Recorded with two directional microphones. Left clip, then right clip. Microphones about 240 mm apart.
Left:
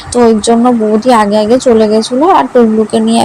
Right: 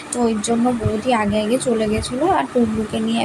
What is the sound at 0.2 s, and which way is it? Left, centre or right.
Speech, left.